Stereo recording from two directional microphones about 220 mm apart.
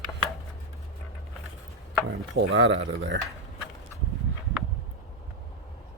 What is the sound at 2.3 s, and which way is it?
Speech, 55° right (ahead or behind).